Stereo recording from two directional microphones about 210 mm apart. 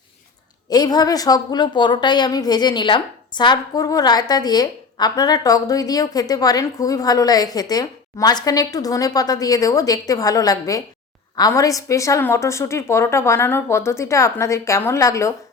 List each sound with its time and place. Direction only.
0.7 s a woman's voice: 20° left (ahead or behind)